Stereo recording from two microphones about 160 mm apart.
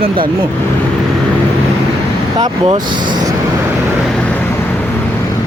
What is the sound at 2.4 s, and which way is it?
Speech, 30° right (ahead or behind).